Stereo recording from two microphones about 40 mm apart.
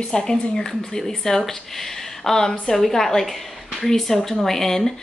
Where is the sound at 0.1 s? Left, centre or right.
Centre.